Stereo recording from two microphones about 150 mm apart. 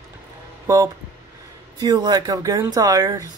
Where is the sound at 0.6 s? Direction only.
20° right (ahead or behind).